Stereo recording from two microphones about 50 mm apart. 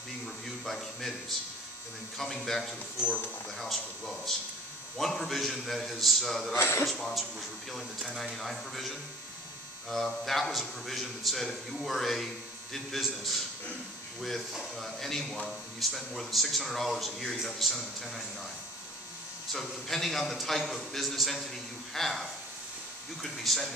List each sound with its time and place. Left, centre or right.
0.7 s a man's voice: centre
2.1 s a man's voice: centre
6.5 s a man's voice: left
6.9 s a man's voice: centre
8.3 s a man's voice: centre
14.5 s a man's voice: centre
19.5 s a man's voice: centre